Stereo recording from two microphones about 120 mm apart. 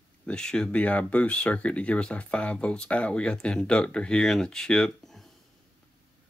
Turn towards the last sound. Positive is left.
turn(degrees=5)  # may be behind; listen again after turning